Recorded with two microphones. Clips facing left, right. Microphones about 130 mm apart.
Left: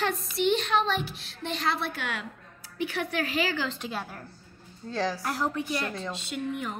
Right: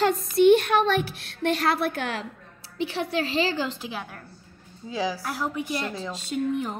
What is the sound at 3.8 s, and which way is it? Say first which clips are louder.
A woman's voice: even; centre (ahead or behind).